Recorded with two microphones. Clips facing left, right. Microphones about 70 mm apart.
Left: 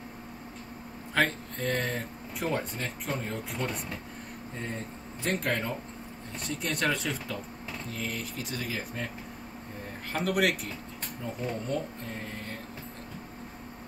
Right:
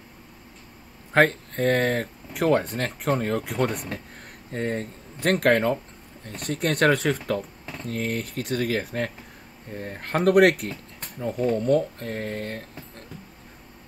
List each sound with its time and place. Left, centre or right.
1.1 s speech: right